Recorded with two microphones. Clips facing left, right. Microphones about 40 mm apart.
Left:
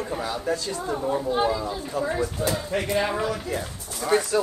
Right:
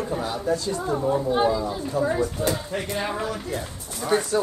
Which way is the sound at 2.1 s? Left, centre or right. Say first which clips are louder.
Right 1 dB; centre.